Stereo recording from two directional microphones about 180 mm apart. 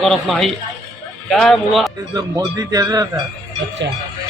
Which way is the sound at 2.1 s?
20° right (ahead or behind).